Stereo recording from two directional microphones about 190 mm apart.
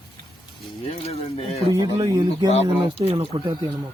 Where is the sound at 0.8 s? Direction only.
30° left (ahead or behind).